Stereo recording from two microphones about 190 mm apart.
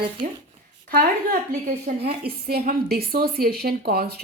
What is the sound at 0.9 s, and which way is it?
A woman's voice, 50° right (ahead or behind).